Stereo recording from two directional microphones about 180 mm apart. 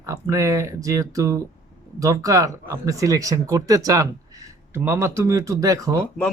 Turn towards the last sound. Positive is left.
turn(degrees=-20)  # may be behind; listen again after turning